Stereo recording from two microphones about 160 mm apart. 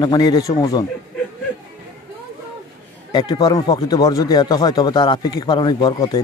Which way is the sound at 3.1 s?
25° left (ahead or behind).